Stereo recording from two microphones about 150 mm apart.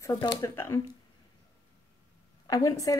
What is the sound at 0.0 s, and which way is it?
Speech, 20° left (ahead or behind).